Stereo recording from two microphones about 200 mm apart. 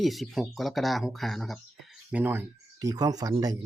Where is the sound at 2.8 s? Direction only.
20° right (ahead or behind).